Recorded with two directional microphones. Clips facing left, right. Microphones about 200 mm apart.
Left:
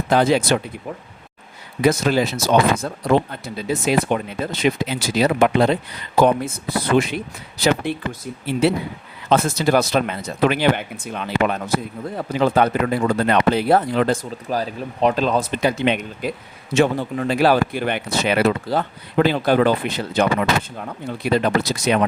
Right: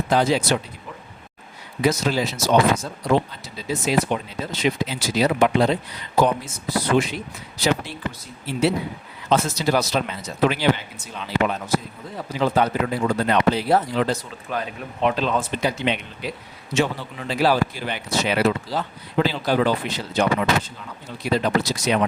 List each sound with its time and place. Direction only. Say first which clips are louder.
0.1 s speech: left 4 dB; 55° left (ahead or behind)
1.8 s speech: left 4 dB; 55° left (ahead or behind)
8.6 s speech: left 2 dB; 55° left (ahead or behind)
14.5 s speech: left 4 dB; 35° left (ahead or behind)
15.5 s speech: left 4 dB; 55° left (ahead or behind)